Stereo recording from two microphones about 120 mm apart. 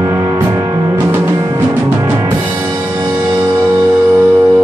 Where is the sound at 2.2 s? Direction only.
25° right (ahead or behind).